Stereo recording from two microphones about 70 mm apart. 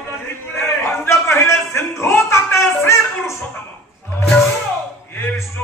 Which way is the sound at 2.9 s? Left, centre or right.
Left.